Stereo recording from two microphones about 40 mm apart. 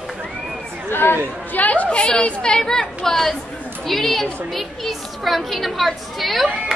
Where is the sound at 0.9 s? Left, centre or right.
Left.